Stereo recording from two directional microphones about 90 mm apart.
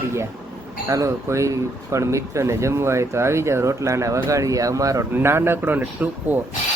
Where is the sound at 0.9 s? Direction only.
35° right (ahead or behind).